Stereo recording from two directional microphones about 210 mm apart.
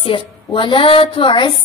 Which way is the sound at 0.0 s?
25° left (ahead or behind).